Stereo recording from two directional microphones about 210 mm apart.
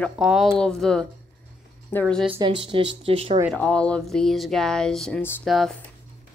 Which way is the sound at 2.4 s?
25° right (ahead or behind).